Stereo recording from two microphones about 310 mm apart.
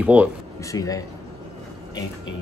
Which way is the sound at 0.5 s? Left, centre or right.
Centre.